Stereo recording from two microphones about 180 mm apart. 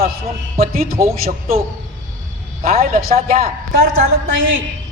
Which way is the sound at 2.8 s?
55° right (ahead or behind).